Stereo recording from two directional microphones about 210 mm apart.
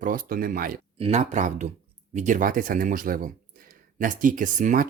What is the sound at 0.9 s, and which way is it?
Speech, 30° right (ahead or behind).